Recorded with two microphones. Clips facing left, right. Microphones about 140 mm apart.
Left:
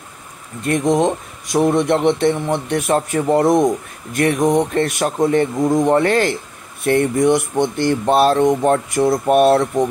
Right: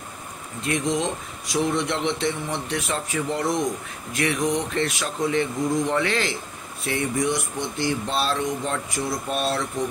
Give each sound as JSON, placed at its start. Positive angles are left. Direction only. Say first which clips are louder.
{"t": 0.7, "sound": "speech", "louder": "left 9 dB", "side_deg": 50}